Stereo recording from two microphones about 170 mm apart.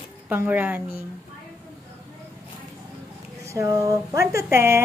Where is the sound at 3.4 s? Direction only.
20° right (ahead or behind).